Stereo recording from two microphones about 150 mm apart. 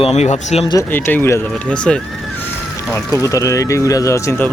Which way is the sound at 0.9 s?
15° left (ahead or behind).